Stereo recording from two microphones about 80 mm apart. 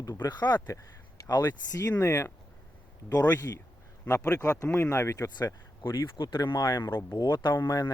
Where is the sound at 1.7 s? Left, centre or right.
Left.